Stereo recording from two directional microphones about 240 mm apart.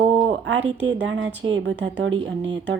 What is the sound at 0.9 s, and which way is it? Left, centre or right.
Speech, right.